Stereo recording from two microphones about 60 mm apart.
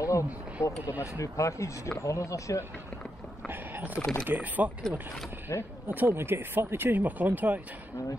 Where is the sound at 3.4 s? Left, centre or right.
Right.